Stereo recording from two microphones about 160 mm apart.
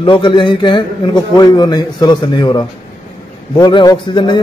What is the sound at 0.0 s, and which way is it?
A man's voice, 30° left (ahead or behind).